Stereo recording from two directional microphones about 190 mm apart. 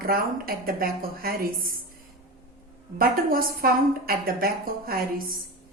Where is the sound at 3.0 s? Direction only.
50° right (ahead or behind).